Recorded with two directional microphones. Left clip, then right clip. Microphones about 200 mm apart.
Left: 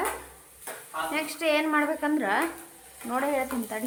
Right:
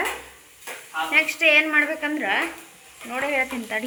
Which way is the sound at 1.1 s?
15° left (ahead or behind).